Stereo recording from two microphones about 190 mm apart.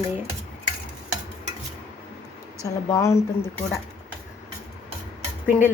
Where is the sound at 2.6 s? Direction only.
15° left (ahead or behind).